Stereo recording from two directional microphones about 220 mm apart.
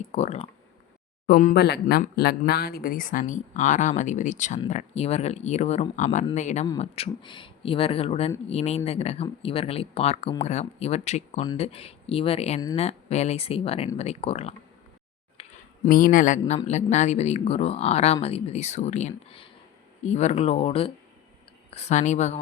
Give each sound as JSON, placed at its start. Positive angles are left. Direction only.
{"t": 0.1, "sound": "speech", "side_deg": 30}
{"t": 1.3, "sound": "speech", "side_deg": 40}
{"t": 15.4, "sound": "a sound", "side_deg": 25}
{"t": 15.9, "sound": "speech", "side_deg": 40}